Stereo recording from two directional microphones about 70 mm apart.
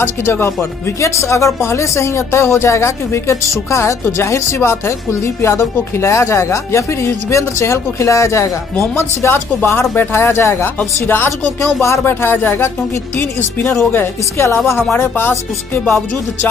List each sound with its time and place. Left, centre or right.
0.0 s speech: left